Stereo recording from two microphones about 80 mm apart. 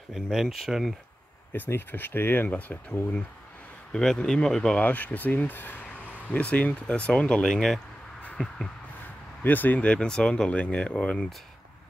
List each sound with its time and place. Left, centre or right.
0.1 s speech: centre
1.5 s speech: left; by 4.7 s centre
4.7 s speech: left
8.2 s a sound: centre
9.4 s speech: left